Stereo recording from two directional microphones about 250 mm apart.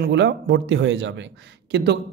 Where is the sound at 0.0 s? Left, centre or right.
Right.